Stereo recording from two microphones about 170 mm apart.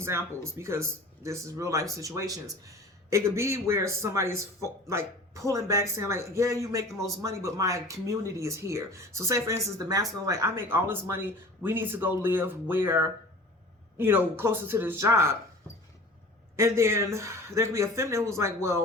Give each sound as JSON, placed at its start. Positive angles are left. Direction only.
{"t": 0.0, "sound": "speech", "side_deg": -15}
{"t": 16.6, "sound": "speech", "side_deg": -15}